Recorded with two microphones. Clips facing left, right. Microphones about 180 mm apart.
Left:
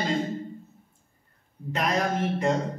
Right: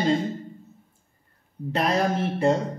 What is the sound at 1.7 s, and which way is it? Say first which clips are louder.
Speech: right 3 dB; 30° right (ahead or behind).